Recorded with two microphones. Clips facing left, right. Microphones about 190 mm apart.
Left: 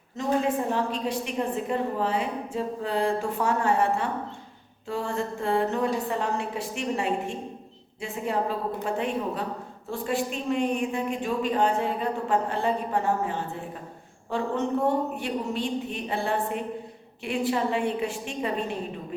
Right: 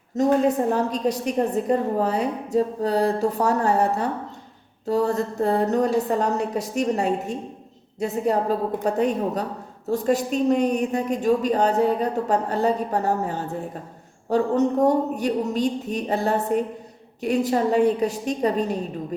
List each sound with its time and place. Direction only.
0.2 s a woman's voice: 40° right (ahead or behind)